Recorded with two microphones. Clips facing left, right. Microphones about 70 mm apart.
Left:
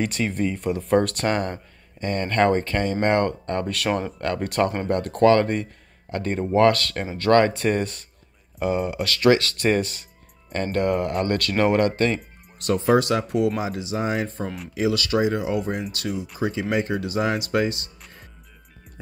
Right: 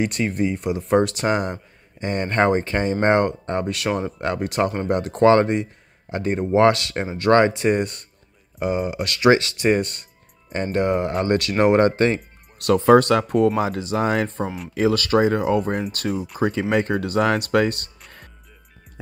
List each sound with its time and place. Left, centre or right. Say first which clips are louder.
0.0 s speech: right 2 dB; centre
3.7 s speech: even; centre
4.0 s speech: right 2 dB; centre
4.4 s speech: even; centre
5.3 s speech: right 2 dB; right
5.6 s speech: right 3 dB; centre
9.3 s speech: right 2 dB; centre
9.6 s speech: right 2 dB; centre
10.5 s speech: right 2 dB; centre
12.5 s speech: right 5 dB; right
14.4 s speech: right 3 dB; centre
14.7 s speech: right 4 dB; right